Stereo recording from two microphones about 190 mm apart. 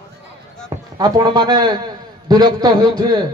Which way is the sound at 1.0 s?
20° right (ahead or behind).